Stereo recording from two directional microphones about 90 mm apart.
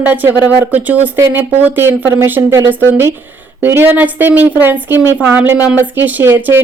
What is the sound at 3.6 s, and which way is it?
A woman's voice, 25° right (ahead or behind).